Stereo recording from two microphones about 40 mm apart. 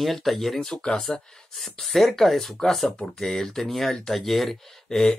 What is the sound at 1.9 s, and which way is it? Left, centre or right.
Speech, centre.